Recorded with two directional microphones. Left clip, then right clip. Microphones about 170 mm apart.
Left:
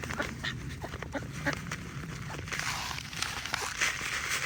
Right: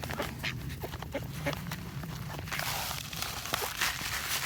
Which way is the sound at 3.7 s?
35° right (ahead or behind).